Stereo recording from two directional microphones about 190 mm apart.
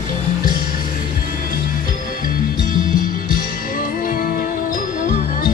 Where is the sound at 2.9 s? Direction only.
45° left (ahead or behind).